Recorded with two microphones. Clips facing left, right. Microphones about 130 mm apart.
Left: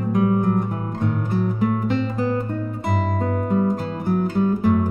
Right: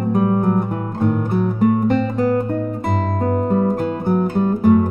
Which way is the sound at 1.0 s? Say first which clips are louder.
Right 5 dB; 50° right (ahead or behind).